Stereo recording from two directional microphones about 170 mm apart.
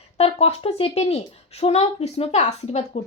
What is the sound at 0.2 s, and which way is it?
A woman's voice, 35° left (ahead or behind).